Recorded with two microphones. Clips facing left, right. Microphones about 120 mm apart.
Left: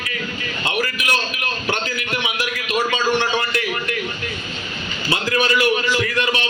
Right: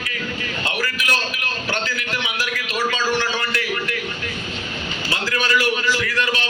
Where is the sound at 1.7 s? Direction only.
20° left (ahead or behind).